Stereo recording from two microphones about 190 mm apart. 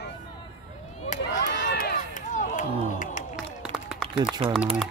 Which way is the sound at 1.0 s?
45° left (ahead or behind).